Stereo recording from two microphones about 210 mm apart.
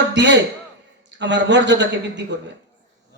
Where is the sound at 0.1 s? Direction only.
55° right (ahead or behind).